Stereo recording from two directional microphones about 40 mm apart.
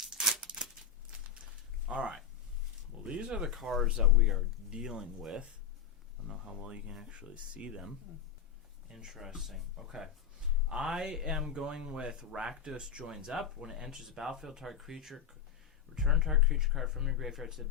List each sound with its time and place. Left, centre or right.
0.0 s a sound: centre
1.9 s speech: right
3.4 s speech: centre
6.2 s a sound: centre
6.6 s speech: right
9.0 s speech: centre
13.6 s speech: centre